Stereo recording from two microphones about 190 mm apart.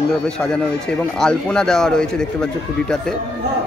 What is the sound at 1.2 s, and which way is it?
Speech, 5° left (ahead or behind).